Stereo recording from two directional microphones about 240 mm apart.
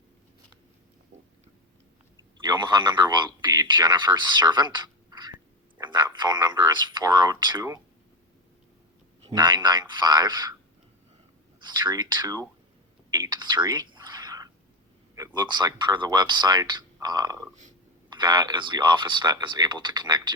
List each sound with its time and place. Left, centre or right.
2.5 s speech: centre
9.3 s a man's voice: centre
11.9 s a man's voice: centre
13.1 s whispering: centre
15.1 s a man's voice: centre